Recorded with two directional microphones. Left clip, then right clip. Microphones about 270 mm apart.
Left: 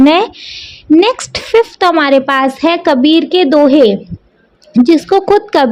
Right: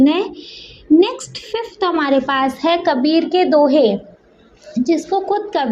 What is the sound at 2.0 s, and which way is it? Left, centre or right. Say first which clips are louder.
Speech: left 5 dB; left.